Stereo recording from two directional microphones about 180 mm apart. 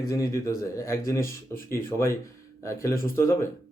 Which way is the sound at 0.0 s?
20° left (ahead or behind).